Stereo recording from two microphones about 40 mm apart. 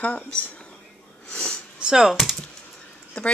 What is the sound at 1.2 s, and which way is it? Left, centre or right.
Speech, centre.